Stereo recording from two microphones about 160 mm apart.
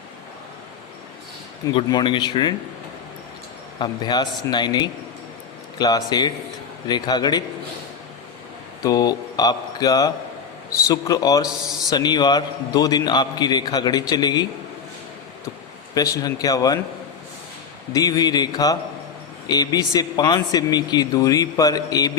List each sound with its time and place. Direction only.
1.7 s a man's voice: 30° left (ahead or behind)
3.8 s a man's voice: 25° left (ahead or behind)
8.8 s a man's voice: 25° left (ahead or behind)
16.0 s a man's voice: 20° left (ahead or behind)
17.9 s a man's voice: 25° left (ahead or behind)